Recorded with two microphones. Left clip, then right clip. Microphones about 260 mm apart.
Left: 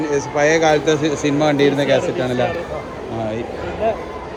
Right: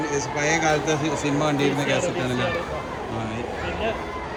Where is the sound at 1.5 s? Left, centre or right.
Centre.